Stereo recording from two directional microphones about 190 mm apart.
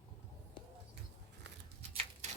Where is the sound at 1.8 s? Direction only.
35° right (ahead or behind).